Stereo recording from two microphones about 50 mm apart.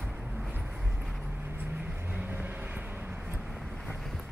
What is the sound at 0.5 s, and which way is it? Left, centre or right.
Vehicle, right.